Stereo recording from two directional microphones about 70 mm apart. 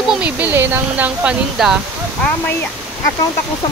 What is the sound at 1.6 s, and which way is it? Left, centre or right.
Speech, centre.